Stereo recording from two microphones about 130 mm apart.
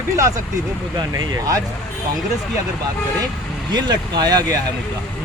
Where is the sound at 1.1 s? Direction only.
25° right (ahead or behind).